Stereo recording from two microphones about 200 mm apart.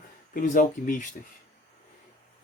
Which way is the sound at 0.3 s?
40° left (ahead or behind).